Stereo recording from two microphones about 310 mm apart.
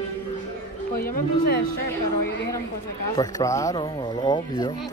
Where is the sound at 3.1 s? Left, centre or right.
Centre.